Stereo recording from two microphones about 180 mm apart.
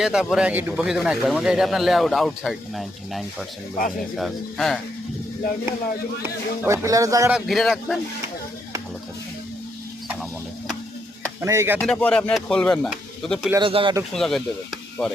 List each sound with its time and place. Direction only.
0.0 s a man's voice: 5° right (ahead or behind)
6.2 s speech: 15° right (ahead or behind)
7.3 s a man's voice: centre (ahead or behind)
11.3 s speech: 15° right (ahead or behind)
11.8 s a man's voice: 5° left (ahead or behind)
13.6 s speech: 30° right (ahead or behind)
14.1 s speech: centre (ahead or behind)